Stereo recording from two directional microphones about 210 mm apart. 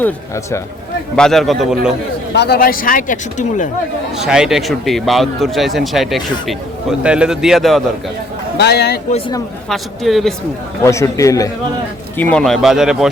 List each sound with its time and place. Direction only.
1.1 s a man's voice: centre (ahead or behind)
2.3 s speech: 50° left (ahead or behind)
4.2 s a man's voice: 5° right (ahead or behind)
8.5 s speech: 50° left (ahead or behind)
9.6 s a man's voice: centre (ahead or behind)
10.8 s a man's voice: 15° left (ahead or behind); by 13.1 s 5° right (ahead or behind)